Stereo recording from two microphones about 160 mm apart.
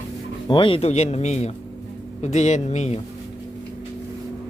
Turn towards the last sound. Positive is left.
turn(degrees=45)  # may be behind; listen again after turning